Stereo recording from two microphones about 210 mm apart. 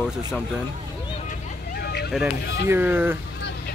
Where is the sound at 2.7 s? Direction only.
10° right (ahead or behind).